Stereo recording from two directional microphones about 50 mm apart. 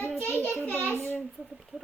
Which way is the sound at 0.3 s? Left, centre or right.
Left.